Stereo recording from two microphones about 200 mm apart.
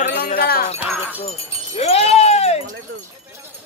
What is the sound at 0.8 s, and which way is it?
Speech, 5° right (ahead or behind).